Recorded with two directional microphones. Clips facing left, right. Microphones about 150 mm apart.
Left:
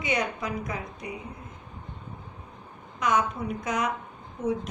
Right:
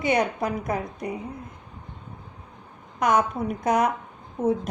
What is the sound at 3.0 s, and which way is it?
A woman's voice, 60° right (ahead or behind).